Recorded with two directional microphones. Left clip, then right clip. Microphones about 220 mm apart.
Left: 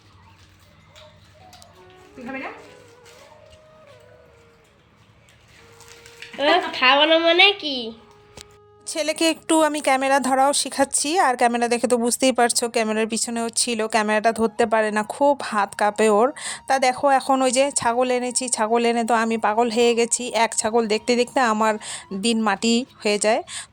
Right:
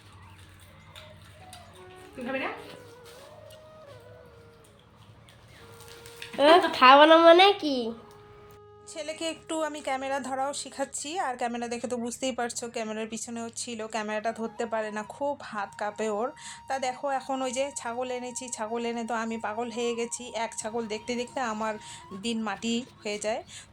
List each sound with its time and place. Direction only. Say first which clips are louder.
6.3 s speech: even; 15° right (ahead or behind)
8.9 s speech: left 12 dB; 45° left (ahead or behind)